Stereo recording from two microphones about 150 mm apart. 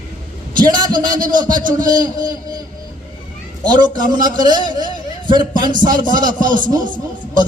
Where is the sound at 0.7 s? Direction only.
30° right (ahead or behind).